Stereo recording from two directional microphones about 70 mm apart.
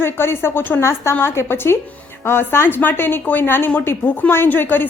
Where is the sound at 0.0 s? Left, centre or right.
Left.